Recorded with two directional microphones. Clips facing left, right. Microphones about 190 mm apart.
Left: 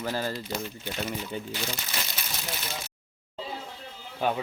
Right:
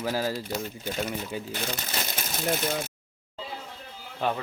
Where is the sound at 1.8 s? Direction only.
45° right (ahead or behind).